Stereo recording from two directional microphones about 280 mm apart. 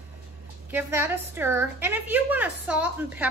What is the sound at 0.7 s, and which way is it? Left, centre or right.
A woman's voice, centre.